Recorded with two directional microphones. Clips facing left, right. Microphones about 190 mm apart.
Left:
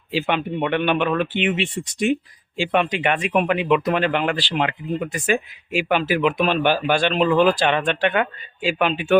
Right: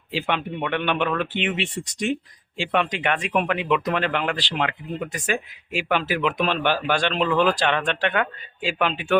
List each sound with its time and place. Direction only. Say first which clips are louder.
0.1 s speech: left 4 dB; 10° left (ahead or behind)
2.6 s speech: left 3 dB; 10° left (ahead or behind)